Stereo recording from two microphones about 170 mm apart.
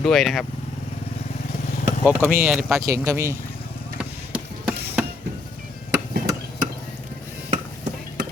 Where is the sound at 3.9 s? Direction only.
5° right (ahead or behind).